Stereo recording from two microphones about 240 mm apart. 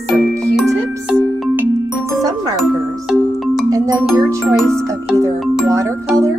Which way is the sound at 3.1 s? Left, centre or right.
Centre.